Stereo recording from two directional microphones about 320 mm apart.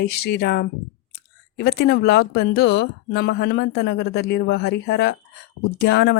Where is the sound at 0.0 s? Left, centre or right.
Left.